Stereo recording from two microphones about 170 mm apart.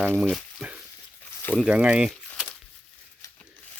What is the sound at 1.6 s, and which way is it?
Speech, 5° right (ahead or behind).